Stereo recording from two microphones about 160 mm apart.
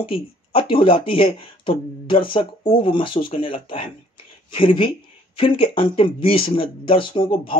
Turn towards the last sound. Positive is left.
turn(degrees=35)  # may be behind; listen again after turning